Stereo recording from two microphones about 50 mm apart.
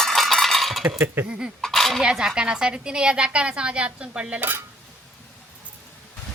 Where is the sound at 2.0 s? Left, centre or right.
Centre.